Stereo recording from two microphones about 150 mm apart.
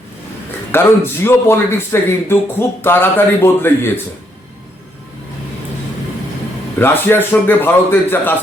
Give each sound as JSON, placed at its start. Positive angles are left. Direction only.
{"t": 0.7, "sound": "a man's voice", "side_deg": 15}
{"t": 6.7, "sound": "a man's voice", "side_deg": 15}